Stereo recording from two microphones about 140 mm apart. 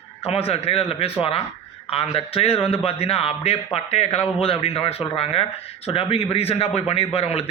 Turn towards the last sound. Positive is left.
turn(degrees=45)  # may be behind; listen again after turning